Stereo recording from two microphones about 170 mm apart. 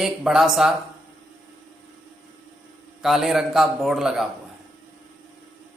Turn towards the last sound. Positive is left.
turn(degrees=0)  # may be behind; listen again after turning